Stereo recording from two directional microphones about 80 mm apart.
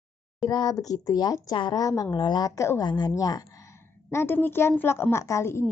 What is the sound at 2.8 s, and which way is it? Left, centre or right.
A woman's voice, left.